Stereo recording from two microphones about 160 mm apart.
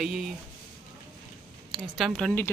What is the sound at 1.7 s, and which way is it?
Speech, centre (ahead or behind).